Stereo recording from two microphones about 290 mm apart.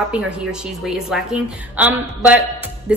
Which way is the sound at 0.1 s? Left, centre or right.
Centre.